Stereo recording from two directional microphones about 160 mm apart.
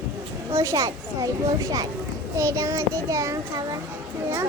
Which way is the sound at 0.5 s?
20° right (ahead or behind).